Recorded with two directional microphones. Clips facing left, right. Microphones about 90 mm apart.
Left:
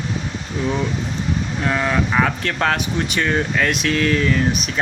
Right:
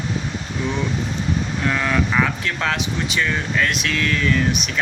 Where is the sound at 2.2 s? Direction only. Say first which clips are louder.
Left 2 dB; 40° left (ahead or behind).